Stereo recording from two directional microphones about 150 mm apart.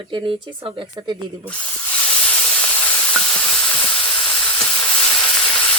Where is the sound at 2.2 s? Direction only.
10° left (ahead or behind).